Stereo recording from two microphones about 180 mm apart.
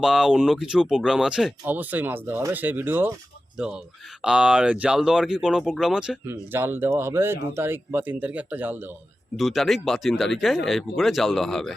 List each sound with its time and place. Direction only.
0.0 s speech: centre (ahead or behind)
9.4 s speech: centre (ahead or behind)